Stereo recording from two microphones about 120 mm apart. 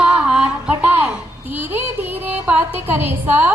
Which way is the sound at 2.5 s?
15° right (ahead or behind).